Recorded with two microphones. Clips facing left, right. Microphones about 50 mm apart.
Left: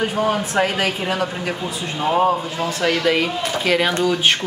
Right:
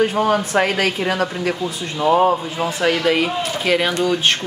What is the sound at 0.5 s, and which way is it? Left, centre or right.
Speech, right.